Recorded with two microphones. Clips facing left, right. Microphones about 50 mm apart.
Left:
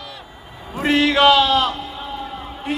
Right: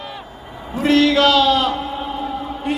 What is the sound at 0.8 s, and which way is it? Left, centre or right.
Speech, centre.